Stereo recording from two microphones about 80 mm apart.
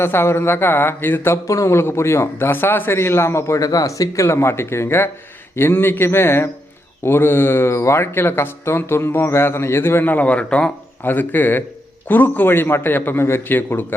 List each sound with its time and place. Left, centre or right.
0.0 s a man's voice: left
1.5 s a man's voice: left; by 10.7 s centre
11.0 s a man's voice: left